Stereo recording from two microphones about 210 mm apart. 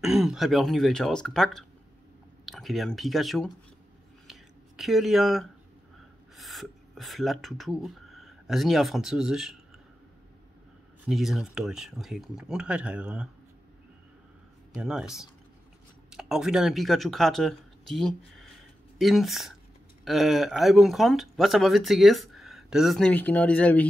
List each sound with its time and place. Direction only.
0.0 s speech: centre (ahead or behind)
4.3 s a sound: centre (ahead or behind)
6.3 s speech: centre (ahead or behind)
11.1 s speech: centre (ahead or behind)
14.8 s speech: centre (ahead or behind)